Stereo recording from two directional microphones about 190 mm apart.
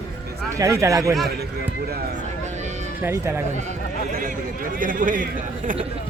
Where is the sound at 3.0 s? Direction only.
10° right (ahead or behind).